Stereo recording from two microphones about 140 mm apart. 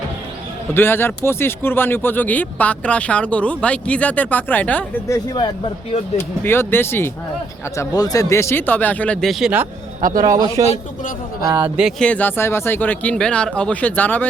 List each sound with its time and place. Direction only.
0.7 s speech: 15° left (ahead or behind)
5.0 s speech: 20° left (ahead or behind)
5.4 s speech: 40° left (ahead or behind)
6.1 s speech: 15° left (ahead or behind)
7.8 s speech: 25° left (ahead or behind); by 9.6 s 5° right (ahead or behind)
10.0 s a man's voice: 75° right (ahead or behind)
10.2 s a man's voice: 30° right (ahead or behind)
11.8 s speech: centre (ahead or behind)